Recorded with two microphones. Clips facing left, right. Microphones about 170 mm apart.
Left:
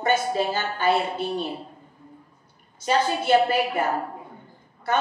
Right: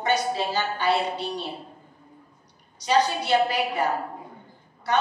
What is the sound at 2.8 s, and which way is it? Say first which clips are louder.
Speech: even; 50° left (ahead or behind).